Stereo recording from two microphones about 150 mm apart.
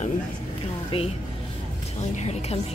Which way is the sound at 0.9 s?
40° left (ahead or behind).